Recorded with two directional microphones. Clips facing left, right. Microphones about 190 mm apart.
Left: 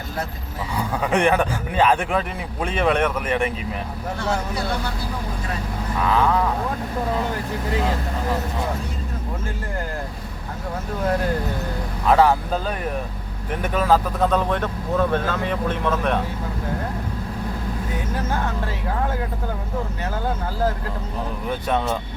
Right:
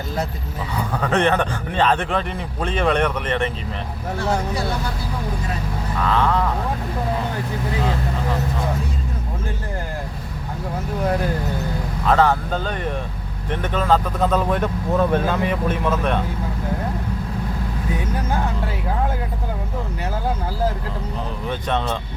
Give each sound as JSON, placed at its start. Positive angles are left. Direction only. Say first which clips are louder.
{"t": 1.0, "sound": "a man's voice", "louder": "even", "side_deg": 10}
{"t": 6.0, "sound": "a man's voice", "louder": "even", "side_deg": 10}
{"t": 12.0, "sound": "a man's voice", "louder": "left 1 dB", "side_deg": 10}